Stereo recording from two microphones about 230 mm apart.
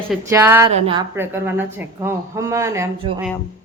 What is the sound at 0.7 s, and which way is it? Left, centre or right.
Speech, right.